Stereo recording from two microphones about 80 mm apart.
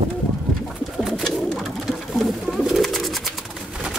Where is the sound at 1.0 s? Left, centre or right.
Centre.